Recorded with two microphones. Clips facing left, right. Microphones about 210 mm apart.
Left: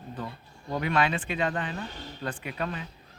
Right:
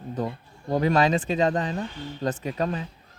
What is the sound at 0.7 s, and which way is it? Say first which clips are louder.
Speech: right 6 dB; 40° right (ahead or behind).